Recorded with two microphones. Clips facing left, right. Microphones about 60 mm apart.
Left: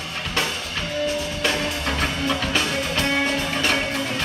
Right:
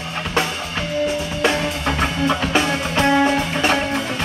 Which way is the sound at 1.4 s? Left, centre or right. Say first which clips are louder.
Right 6 dB; right.